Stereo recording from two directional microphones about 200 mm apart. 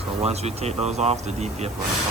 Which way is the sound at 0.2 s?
30° right (ahead or behind).